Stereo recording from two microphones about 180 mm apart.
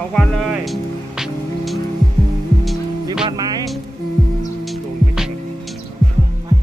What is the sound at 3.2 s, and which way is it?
Music, 20° right (ahead or behind).